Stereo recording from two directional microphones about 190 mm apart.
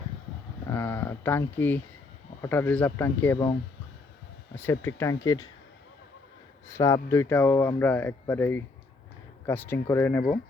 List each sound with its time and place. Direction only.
0.7 s a sound: 10° left (ahead or behind)
2.4 s speech: 10° left (ahead or behind)
3.3 s speech: 20° left (ahead or behind)
6.7 s speech: 15° left (ahead or behind)